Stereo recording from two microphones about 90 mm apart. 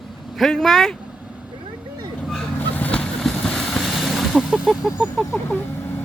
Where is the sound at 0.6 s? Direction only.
Centre (ahead or behind).